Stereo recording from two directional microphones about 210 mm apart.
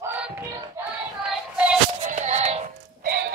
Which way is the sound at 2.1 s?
35° right (ahead or behind).